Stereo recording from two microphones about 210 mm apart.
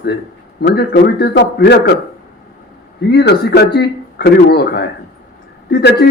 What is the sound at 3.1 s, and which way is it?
Speech, 50° left (ahead or behind).